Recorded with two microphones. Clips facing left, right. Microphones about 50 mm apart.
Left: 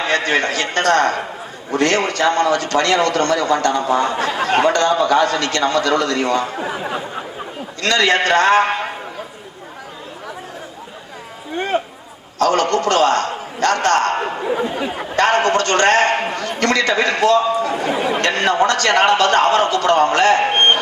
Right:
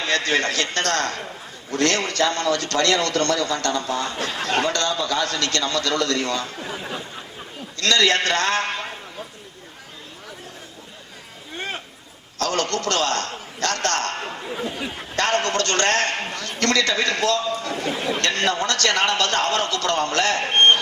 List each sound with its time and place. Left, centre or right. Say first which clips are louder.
0.0 s a man's voice: left 4 dB; centre
11.7 s a sound: left 15 dB; centre
12.4 s a man's voice: left 8 dB; centre